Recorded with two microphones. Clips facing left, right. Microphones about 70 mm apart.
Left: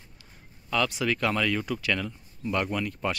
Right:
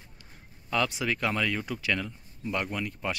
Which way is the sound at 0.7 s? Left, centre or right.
Right.